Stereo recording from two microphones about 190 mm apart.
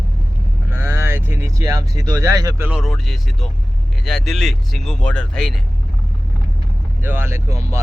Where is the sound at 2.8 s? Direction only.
Centre (ahead or behind).